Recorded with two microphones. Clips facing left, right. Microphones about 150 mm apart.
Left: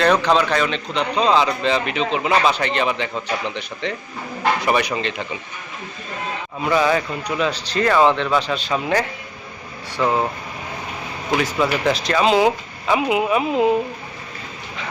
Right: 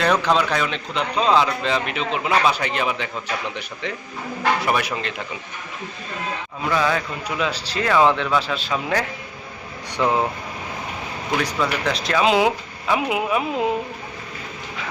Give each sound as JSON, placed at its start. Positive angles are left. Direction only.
{"t": 0.0, "sound": "a man's voice", "side_deg": -5}
{"t": 6.7, "sound": "a man's voice", "side_deg": 5}
{"t": 10.0, "sound": "speech", "side_deg": -15}
{"t": 11.3, "sound": "a man's voice", "side_deg": 5}